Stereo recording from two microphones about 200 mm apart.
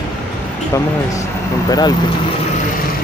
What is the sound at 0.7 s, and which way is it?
Speech, 15° left (ahead or behind).